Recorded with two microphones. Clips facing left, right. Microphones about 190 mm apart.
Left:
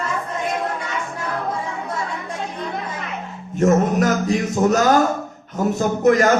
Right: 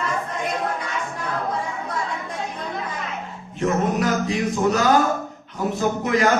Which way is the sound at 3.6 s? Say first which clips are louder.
Left 5 dB; 45° left (ahead or behind).